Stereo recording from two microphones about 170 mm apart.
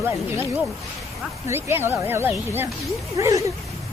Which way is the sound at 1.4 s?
15° right (ahead or behind).